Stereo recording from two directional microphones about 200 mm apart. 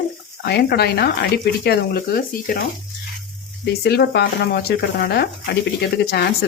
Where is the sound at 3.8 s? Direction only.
55° left (ahead or behind).